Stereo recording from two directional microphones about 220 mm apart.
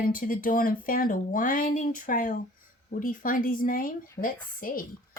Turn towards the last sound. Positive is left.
turn(degrees=40)  # may be behind; listen again after turning